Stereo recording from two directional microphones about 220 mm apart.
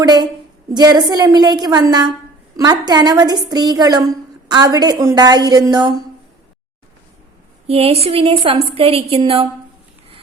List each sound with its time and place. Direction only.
0.0 s a woman's voice: 20° right (ahead or behind)
7.7 s a woman's voice: 25° right (ahead or behind)